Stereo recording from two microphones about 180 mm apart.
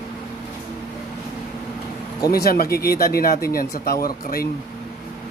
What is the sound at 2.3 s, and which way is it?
Speech, 55° left (ahead or behind).